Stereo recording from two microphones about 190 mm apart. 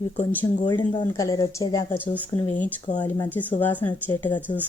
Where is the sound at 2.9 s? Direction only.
40° left (ahead or behind).